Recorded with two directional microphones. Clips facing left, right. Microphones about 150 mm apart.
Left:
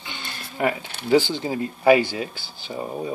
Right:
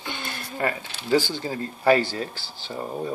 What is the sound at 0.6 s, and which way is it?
Speech, 20° left (ahead or behind).